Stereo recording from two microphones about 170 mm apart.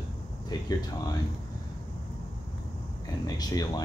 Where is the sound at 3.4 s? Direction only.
20° left (ahead or behind).